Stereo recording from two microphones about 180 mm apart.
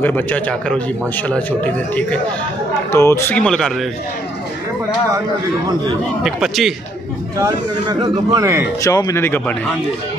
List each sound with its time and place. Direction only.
0.0 s a man's voice: 10° left (ahead or behind)
6.2 s a man's voice: centre (ahead or behind)
7.3 s a man's voice: 20° right (ahead or behind)
8.8 s a man's voice: 20° left (ahead or behind)